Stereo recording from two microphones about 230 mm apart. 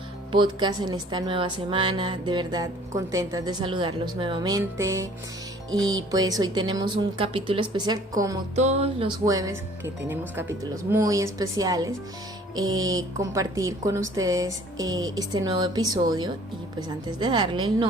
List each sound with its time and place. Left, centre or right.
0.3 s a woman's voice: centre
8.5 s a woman's voice: right